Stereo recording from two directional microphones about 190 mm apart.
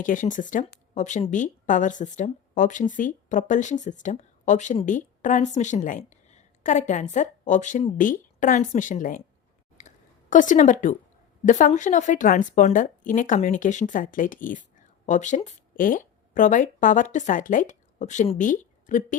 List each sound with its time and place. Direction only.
0.0 s a woman's voice: 45° left (ahead or behind)
9.7 s a sound: 40° left (ahead or behind)
11.4 s a woman's voice: 40° left (ahead or behind)